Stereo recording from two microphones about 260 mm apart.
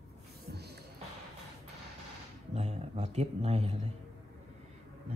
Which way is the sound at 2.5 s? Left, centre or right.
Right.